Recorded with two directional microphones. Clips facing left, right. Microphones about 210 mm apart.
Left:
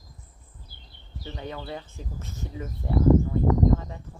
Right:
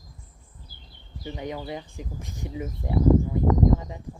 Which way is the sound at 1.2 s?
15° right (ahead or behind).